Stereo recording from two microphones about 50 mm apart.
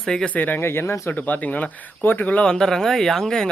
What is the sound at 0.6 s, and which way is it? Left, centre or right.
Speech, left.